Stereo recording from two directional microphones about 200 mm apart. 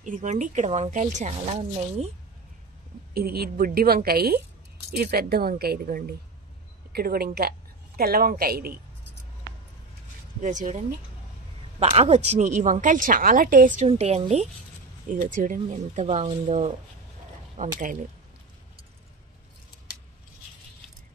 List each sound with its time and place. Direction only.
0.0 s a woman's voice: 40° right (ahead or behind)
3.2 s a woman's voice: 50° right (ahead or behind)
10.4 s a woman's voice: 40° right (ahead or behind)
11.8 s a woman's voice: 30° right (ahead or behind)
13.8 s a woman's voice: 30° right (ahead or behind)